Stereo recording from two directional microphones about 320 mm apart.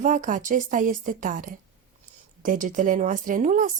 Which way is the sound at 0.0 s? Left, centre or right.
Right.